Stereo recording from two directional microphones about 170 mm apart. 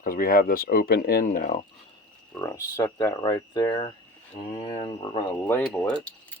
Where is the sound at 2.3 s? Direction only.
20° left (ahead or behind).